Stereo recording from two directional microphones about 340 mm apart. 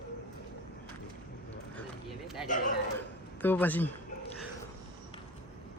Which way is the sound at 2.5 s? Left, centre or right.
Left.